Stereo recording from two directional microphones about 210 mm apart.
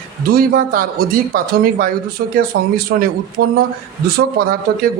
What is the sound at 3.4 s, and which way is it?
Speech, 50° right (ahead or behind).